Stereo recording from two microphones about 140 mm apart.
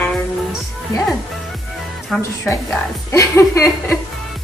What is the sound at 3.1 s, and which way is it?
Speech, 20° left (ahead or behind).